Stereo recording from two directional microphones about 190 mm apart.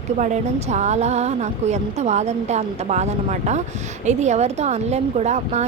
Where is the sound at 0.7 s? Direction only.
35° right (ahead or behind).